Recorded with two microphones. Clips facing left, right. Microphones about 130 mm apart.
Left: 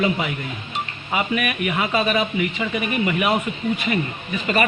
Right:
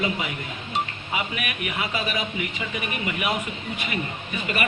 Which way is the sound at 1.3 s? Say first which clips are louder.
Left 8 dB; 90° left.